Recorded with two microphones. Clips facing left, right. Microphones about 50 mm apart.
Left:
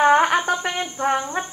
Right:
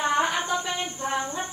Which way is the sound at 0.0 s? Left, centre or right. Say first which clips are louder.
Left 8 dB; left.